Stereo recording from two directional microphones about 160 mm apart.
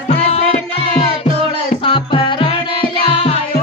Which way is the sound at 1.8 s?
30° left (ahead or behind).